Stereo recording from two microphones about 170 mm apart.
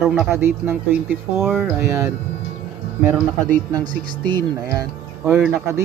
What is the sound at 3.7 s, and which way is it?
Speech, 25° right (ahead or behind).